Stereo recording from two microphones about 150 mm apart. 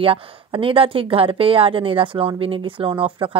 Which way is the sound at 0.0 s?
35° right (ahead or behind).